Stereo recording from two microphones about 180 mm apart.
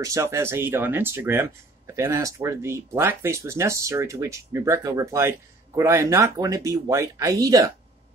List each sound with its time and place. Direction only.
0.0 s speech: 15° right (ahead or behind)